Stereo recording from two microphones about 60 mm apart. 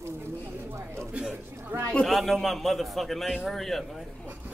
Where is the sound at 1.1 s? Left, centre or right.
Centre.